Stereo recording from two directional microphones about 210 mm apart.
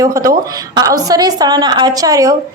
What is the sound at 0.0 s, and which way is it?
A woman's voice, 15° right (ahead or behind).